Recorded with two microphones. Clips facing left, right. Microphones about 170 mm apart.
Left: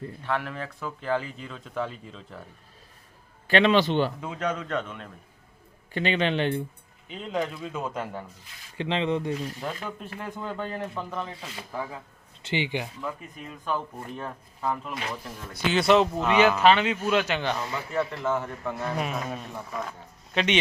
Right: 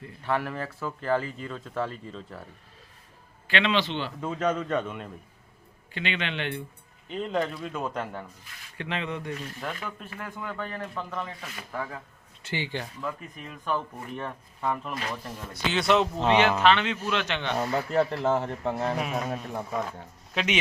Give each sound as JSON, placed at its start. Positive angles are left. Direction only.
{"t": 0.3, "sound": "speech", "side_deg": -5}
{"t": 3.4, "sound": "a man's voice", "side_deg": 45}
{"t": 4.2, "sound": "a man's voice", "side_deg": -5}
{"t": 5.9, "sound": "a man's voice", "side_deg": 40}
{"t": 7.1, "sound": "speech", "side_deg": 0}
{"t": 8.8, "sound": "speech", "side_deg": 25}
{"t": 10.9, "sound": "speech", "side_deg": 5}
{"t": 11.3, "sound": "speech", "side_deg": 25}
{"t": 11.7, "sound": "speech", "side_deg": 15}
{"t": 14.2, "sound": "speech", "side_deg": 5}
{"t": 17.6, "sound": "a man's voice", "side_deg": -40}
{"t": 19.1, "sound": "speech", "side_deg": -50}
{"t": 20.3, "sound": "speech", "side_deg": -5}